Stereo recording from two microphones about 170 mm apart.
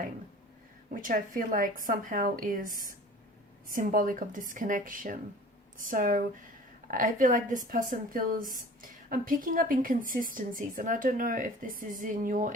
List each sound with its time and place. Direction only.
1.0 s a woman's voice: 55° right (ahead or behind)